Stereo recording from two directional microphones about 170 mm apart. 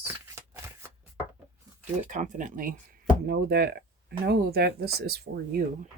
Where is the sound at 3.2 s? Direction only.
60° right (ahead or behind).